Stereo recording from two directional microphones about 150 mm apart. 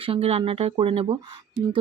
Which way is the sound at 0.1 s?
40° right (ahead or behind).